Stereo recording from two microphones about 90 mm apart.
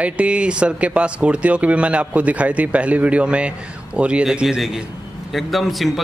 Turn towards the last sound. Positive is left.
turn(degrees=0)  # may be behind; listen again after turning